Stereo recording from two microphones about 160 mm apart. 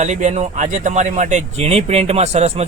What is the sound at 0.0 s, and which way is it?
Speech, 45° right (ahead or behind).